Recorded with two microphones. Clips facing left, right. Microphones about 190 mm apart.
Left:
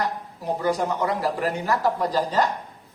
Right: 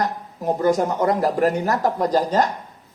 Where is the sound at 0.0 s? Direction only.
45° right (ahead or behind).